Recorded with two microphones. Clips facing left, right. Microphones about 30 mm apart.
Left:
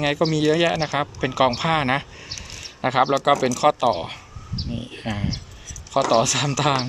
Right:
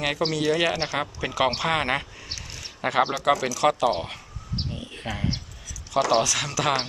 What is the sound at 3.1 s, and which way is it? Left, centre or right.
Speech, centre.